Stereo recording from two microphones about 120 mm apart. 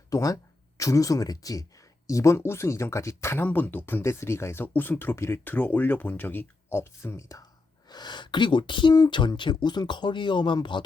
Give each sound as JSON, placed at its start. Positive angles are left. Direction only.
{"t": 0.1, "sound": "speech", "side_deg": 30}